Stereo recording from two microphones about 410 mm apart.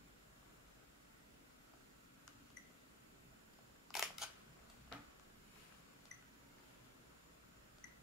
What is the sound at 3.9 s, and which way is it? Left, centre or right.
Camera, centre.